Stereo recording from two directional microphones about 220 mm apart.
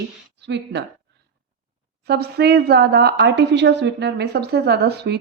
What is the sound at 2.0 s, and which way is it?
A woman's voice, 45° right (ahead or behind).